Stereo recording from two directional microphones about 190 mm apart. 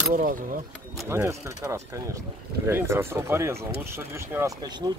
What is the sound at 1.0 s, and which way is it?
Speech, 15° right (ahead or behind).